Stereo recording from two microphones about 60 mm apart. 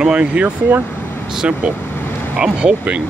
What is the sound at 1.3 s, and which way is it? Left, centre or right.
Speech, centre.